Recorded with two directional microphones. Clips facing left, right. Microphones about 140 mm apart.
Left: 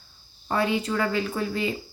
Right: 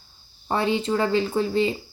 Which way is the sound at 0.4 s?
25° right (ahead or behind).